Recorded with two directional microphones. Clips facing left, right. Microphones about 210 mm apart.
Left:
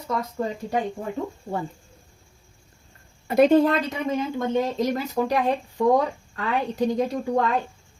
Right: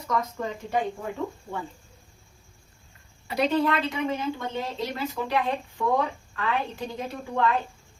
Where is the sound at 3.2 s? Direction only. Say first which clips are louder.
Left 7 dB; 50° left (ahead or behind).